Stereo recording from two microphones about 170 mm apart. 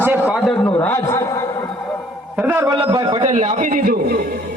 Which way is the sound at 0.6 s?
10° left (ahead or behind).